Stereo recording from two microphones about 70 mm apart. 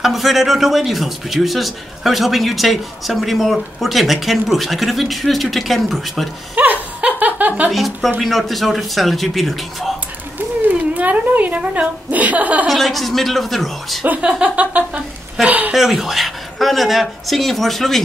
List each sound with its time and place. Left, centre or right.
0.0 s a man's voice: centre
6.5 s laughter: right
7.7 s a man's voice: centre
11.0 s a woman's voice: right
12.6 s a man's voice: centre
14.0 s a woman's voice: centre
15.7 s a man's voice: centre